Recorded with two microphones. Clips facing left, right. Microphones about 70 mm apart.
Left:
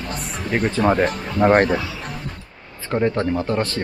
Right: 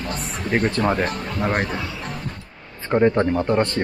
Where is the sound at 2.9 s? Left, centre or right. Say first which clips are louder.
Right 3 dB; centre.